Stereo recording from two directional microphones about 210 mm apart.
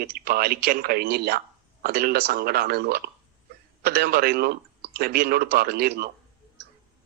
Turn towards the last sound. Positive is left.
turn(degrees=-50)  # may be behind; listen again after turning